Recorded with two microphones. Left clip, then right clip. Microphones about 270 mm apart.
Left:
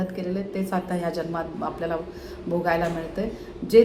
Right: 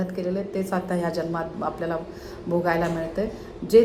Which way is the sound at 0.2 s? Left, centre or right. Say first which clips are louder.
Right 2 dB; centre.